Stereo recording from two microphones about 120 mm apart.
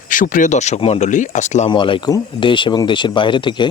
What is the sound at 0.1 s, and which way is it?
Speech, 90° left.